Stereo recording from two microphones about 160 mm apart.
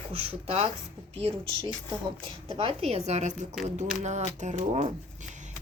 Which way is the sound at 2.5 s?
35° right (ahead or behind).